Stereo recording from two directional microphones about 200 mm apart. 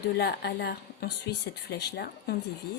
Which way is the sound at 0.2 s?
55° left (ahead or behind).